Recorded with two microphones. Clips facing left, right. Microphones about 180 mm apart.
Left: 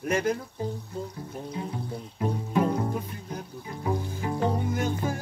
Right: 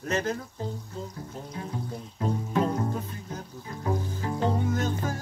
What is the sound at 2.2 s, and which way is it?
Music, 15° left (ahead or behind).